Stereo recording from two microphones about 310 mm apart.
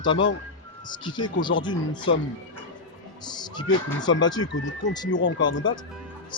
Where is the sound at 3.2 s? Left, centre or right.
Centre.